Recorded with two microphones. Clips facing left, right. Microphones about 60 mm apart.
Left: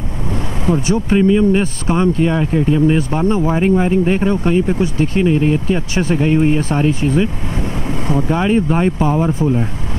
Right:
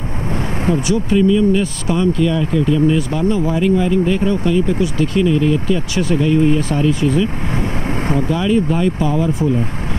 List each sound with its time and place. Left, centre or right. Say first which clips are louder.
0.8 s speech: left 1 dB; left
8.3 s speech: left 2 dB; left